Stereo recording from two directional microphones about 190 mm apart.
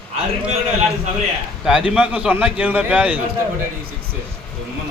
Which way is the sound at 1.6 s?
5° right (ahead or behind).